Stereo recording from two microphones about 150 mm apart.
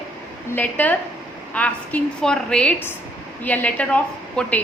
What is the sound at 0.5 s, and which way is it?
A woman's voice, 10° left (ahead or behind).